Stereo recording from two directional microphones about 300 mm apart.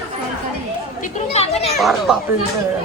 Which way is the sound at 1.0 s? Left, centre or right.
Left.